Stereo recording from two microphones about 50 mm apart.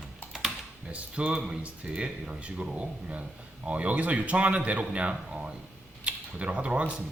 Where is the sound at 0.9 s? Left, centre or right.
Right.